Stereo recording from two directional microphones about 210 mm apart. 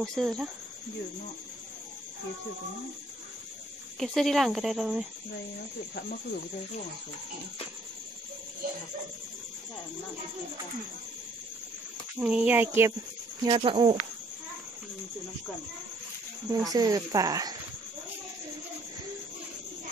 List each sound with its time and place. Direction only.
0.0 s speech: centre (ahead or behind)
4.0 s speech: centre (ahead or behind)
12.2 s speech: 5° right (ahead or behind)
13.4 s speech: 25° right (ahead or behind)
16.4 s speech: 15° right (ahead or behind)